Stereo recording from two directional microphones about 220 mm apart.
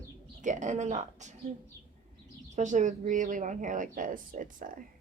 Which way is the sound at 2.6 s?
35° right (ahead or behind).